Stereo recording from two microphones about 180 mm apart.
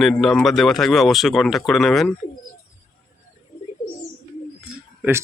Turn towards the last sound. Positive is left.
turn(degrees=-10)  # may be behind; listen again after turning